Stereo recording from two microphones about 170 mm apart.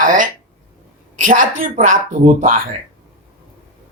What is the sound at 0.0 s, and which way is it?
A man's voice, 50° right (ahead or behind).